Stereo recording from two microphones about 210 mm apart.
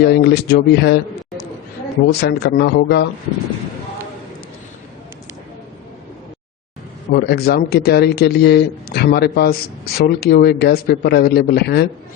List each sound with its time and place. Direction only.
0.0 s speech: 55° left (ahead or behind)
2.2 s speech: 55° left (ahead or behind)
7.1 s speech: 50° left (ahead or behind)